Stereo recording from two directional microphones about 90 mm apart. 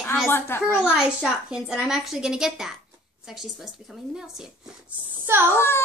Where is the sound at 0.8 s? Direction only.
5° right (ahead or behind).